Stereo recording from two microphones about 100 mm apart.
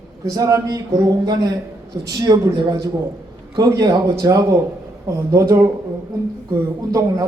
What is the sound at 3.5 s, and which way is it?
Speech, 40° right (ahead or behind).